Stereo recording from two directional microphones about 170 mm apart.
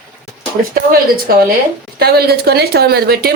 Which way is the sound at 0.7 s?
60° right (ahead or behind).